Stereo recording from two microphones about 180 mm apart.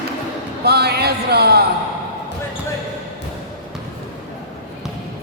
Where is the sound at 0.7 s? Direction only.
65° right (ahead or behind).